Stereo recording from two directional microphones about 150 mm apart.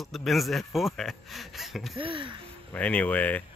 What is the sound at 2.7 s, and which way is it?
Speech, 10° left (ahead or behind).